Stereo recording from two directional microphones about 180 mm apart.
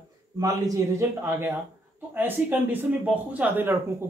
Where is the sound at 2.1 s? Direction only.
10° right (ahead or behind).